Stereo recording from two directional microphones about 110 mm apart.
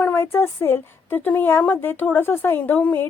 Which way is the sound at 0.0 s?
20° left (ahead or behind).